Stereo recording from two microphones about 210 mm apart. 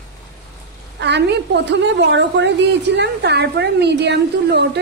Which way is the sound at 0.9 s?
55° right (ahead or behind).